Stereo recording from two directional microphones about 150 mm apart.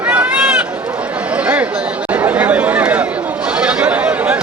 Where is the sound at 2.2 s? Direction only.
10° right (ahead or behind).